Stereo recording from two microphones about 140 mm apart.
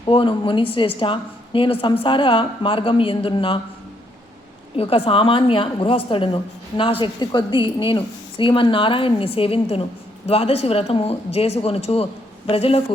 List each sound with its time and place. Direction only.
0.0 s a woman's voice: 35° left (ahead or behind)
4.8 s a woman's voice: 45° left (ahead or behind)